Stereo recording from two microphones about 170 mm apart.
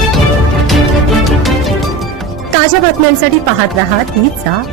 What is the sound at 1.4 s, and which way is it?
Music, centre (ahead or behind).